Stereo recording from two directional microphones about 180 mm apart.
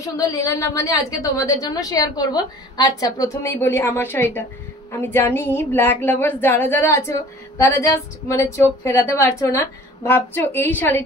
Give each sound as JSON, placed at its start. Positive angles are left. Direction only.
{"t": 0.0, "sound": "a woman's voice", "side_deg": 20}